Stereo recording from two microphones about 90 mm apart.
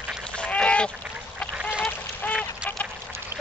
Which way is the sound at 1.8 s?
20° left (ahead or behind).